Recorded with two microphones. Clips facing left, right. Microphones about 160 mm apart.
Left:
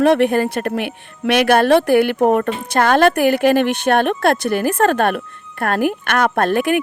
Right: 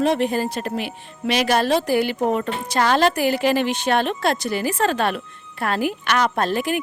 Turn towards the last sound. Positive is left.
turn(degrees=60)  # may be behind; listen again after turning